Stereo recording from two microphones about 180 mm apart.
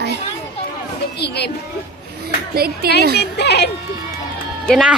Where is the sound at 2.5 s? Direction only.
60° right (ahead or behind).